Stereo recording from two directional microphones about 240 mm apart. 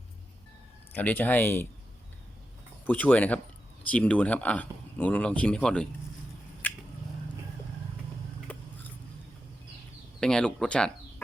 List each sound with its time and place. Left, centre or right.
0.9 s speech: centre
2.8 s speech: centre
6.6 s a sound: centre
8.5 s biting: centre
10.2 s speech: centre